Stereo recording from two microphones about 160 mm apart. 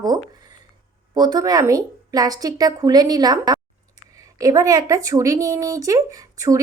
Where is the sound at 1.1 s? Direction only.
25° right (ahead or behind).